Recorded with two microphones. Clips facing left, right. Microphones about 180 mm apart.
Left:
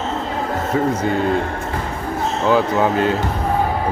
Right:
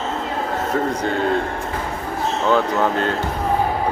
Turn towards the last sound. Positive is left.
turn(degrees=10)  # may be behind; listen again after turning